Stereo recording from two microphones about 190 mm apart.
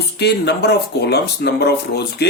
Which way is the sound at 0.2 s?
60° left (ahead or behind).